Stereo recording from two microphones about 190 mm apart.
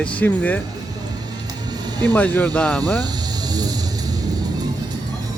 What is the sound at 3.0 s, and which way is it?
Vehicle, 20° right (ahead or behind).